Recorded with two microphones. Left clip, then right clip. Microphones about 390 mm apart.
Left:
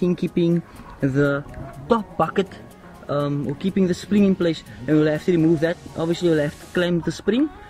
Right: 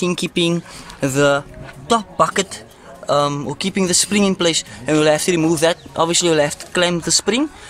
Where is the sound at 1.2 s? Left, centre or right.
Centre.